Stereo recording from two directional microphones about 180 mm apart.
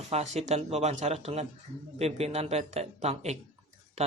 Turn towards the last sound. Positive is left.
turn(degrees=-40)  # may be behind; listen again after turning